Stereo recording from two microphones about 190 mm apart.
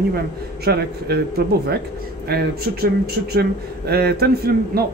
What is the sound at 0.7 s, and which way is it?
A man's voice, 55° right (ahead or behind).